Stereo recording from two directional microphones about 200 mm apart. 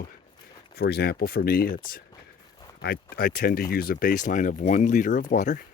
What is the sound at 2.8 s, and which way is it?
Speech, 50° left (ahead or behind).